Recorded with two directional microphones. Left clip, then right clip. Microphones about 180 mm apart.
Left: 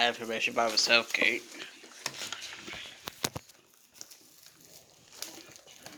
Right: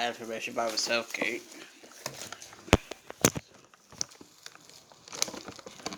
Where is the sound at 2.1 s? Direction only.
60° right (ahead or behind).